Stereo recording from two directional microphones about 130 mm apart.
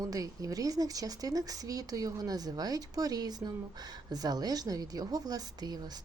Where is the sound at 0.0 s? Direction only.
25° right (ahead or behind).